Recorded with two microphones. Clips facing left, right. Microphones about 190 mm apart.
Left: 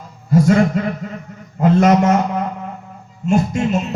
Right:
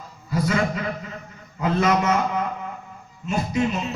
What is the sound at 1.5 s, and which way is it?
Speech, 45° left (ahead or behind).